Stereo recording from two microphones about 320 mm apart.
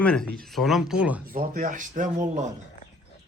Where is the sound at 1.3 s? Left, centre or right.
Right.